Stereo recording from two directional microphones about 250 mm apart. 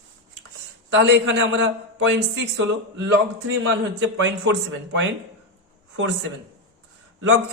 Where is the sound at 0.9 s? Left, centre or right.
Right.